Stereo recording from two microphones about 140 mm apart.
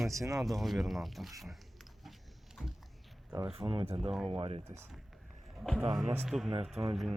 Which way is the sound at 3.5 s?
40° right (ahead or behind).